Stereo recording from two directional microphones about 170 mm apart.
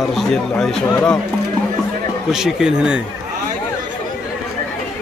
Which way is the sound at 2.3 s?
5° right (ahead or behind).